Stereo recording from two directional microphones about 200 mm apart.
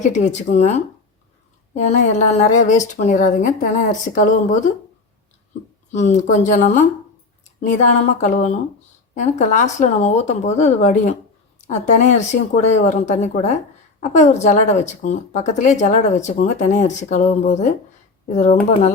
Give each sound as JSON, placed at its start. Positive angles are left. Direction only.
{"t": 0.0, "sound": "speech", "side_deg": 35}
{"t": 5.9, "sound": "speech", "side_deg": 35}